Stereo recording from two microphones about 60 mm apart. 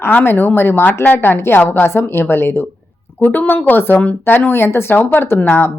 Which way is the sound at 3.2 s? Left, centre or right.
Left.